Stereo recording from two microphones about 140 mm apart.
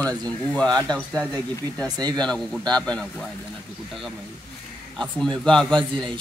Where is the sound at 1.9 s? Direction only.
30° right (ahead or behind).